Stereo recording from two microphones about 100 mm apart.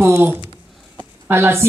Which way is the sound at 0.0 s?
25° right (ahead or behind).